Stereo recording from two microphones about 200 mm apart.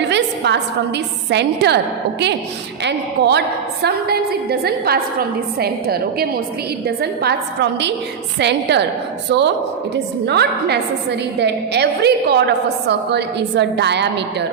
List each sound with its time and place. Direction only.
0.0 s a woman's voice: 60° right (ahead or behind)
2.8 s a woman's voice: 60° right (ahead or behind)